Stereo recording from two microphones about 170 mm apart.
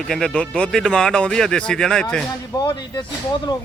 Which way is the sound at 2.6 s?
25° left (ahead or behind).